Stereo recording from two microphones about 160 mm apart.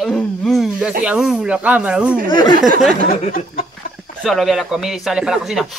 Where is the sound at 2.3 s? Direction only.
30° left (ahead or behind).